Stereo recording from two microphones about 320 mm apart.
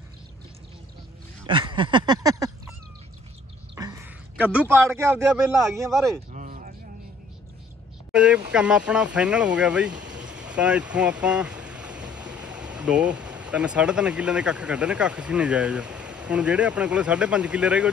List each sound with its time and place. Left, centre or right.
1.4 s a sound: centre
3.7 s a man's voice: centre
6.3 s a sound: right
8.1 s speech: centre
9.8 s speech: right
10.2 s speech: centre